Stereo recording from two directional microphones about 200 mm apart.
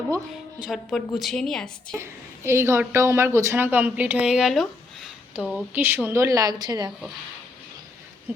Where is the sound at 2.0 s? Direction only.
15° right (ahead or behind).